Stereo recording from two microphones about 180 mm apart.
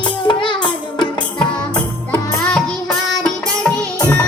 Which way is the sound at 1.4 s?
5° left (ahead or behind).